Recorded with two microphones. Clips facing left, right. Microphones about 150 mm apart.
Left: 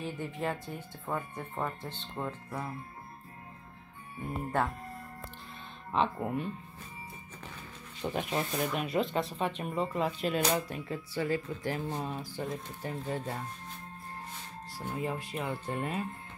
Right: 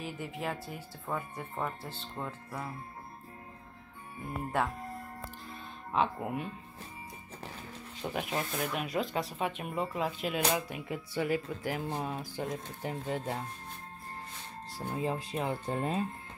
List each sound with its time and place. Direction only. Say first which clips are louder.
0.0 s speech: left 2 dB; 5° right (ahead or behind)
5.9 s speech: left 1 dB; 5° right (ahead or behind)
8.0 s speech: left 2 dB; centre (ahead or behind)
14.9 s speech: right 1 dB; 25° right (ahead or behind)